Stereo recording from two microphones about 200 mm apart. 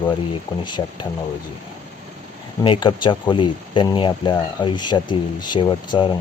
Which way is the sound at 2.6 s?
25° left (ahead or behind).